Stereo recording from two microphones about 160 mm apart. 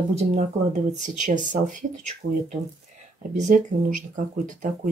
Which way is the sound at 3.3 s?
50° right (ahead or behind).